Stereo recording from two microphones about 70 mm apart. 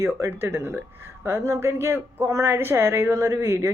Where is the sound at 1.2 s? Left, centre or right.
Right.